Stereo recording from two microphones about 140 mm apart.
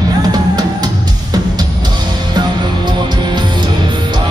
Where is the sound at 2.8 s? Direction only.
30° right (ahead or behind).